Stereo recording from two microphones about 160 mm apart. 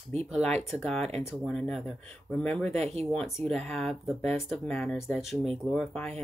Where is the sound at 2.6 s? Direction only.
40° right (ahead or behind).